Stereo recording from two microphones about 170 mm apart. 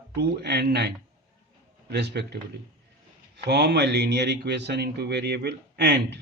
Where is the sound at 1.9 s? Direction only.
80° right.